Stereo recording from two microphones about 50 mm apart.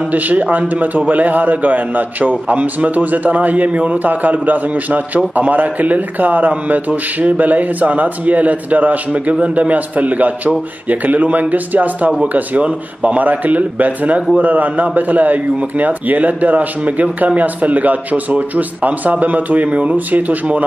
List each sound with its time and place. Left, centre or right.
0.1 s a man's voice: right